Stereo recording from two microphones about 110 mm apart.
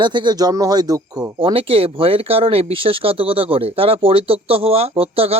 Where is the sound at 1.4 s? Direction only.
55° right (ahead or behind).